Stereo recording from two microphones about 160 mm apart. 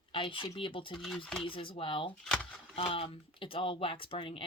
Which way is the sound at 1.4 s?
35° left (ahead or behind).